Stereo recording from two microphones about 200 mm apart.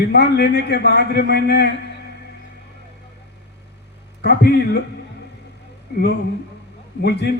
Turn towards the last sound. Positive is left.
turn(degrees=55)  # may be behind; listen again after turning